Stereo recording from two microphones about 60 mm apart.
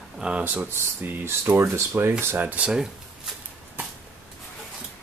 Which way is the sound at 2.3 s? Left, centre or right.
Right.